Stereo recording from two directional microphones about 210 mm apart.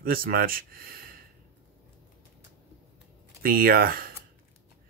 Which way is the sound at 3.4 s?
45° right (ahead or behind).